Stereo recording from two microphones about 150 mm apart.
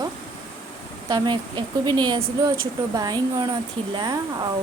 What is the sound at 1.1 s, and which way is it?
A woman's voice, 30° right (ahead or behind).